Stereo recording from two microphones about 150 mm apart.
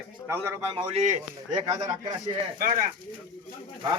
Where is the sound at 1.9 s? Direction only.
25° right (ahead or behind).